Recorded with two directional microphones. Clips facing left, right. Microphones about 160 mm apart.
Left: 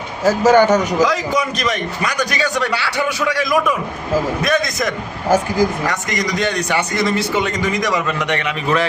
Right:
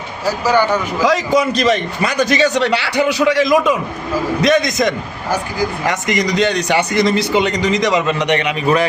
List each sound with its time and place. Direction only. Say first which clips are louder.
0.3 s a man's voice: left 4 dB; 45° left (ahead or behind)
1.0 s a man's voice: right 4 dB; 30° right (ahead or behind)